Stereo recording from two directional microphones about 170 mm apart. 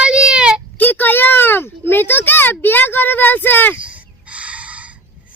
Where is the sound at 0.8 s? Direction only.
10° left (ahead or behind).